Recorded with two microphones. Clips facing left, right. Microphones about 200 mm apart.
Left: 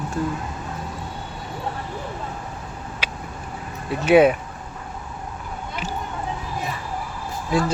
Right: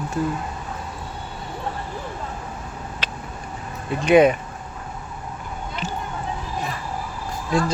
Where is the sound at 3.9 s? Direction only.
5° left (ahead or behind).